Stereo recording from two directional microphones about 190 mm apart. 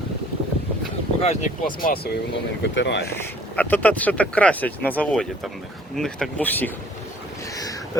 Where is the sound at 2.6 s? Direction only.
65° left (ahead or behind).